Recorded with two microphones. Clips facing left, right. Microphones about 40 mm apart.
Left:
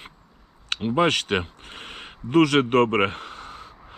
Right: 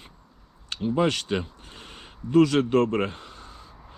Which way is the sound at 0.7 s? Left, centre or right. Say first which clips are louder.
Left 3 dB; left.